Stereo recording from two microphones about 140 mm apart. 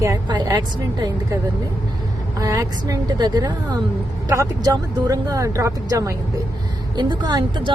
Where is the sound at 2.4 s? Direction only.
25° right (ahead or behind).